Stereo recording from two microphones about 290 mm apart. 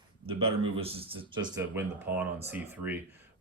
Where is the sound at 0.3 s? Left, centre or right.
Centre.